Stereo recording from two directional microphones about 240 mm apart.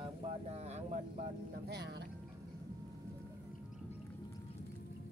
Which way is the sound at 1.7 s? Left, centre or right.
Right.